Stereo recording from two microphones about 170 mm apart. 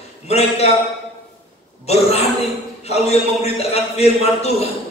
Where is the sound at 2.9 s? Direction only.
40° left (ahead or behind).